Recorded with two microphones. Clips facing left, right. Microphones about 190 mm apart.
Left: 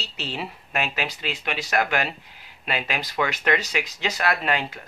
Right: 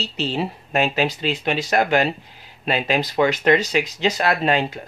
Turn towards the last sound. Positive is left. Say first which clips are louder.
# right 5 dB
turn(degrees=-25)  # may be behind; listen again after turning